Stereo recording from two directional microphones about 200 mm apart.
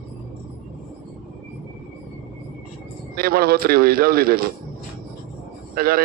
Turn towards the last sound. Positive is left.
turn(degrees=-45)  # may be behind; listen again after turning